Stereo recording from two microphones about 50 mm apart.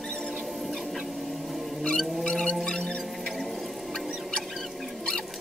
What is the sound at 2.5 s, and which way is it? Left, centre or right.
Music, centre.